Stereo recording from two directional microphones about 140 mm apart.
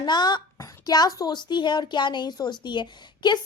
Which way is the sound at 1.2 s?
30° left (ahead or behind).